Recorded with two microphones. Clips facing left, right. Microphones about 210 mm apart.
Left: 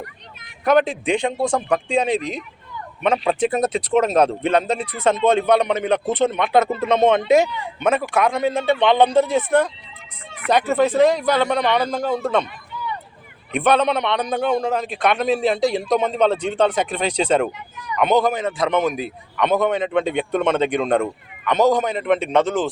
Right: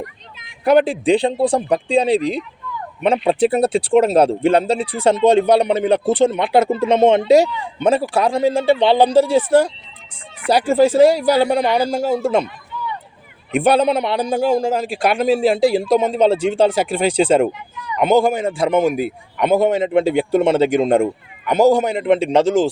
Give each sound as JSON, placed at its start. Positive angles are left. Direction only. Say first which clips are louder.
{"t": 0.6, "sound": "a man's voice", "louder": "right 3 dB", "side_deg": -30}
{"t": 13.6, "sound": "a man's voice", "louder": "right 3 dB", "side_deg": -30}
{"t": 21.4, "sound": "speech", "louder": "right 3 dB", "side_deg": -10}
{"t": 21.7, "sound": "a man's voice", "louder": "right 4 dB", "side_deg": -30}